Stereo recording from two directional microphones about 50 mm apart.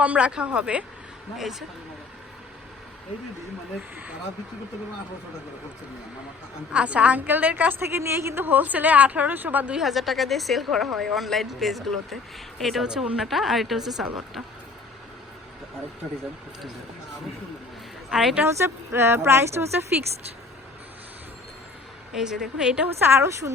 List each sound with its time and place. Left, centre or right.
0.0 s speech: right
1.4 s speech: centre
6.7 s speech: right
7.3 s speech: right
7.7 s speech: right
8.4 s speech: right
9.7 s speech: centre
12.8 s a woman's voice: centre
18.1 s a woman's voice: centre
18.4 s speech: right
22.1 s a woman's voice: centre
23.0 s speech: right